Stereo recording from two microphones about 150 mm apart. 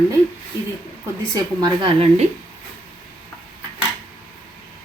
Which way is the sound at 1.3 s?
25° right (ahead or behind).